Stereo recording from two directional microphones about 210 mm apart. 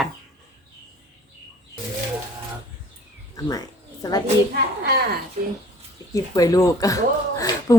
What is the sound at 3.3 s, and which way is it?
Speech, 15° left (ahead or behind).